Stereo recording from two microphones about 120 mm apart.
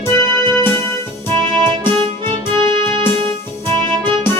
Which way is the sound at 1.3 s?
45° right (ahead or behind).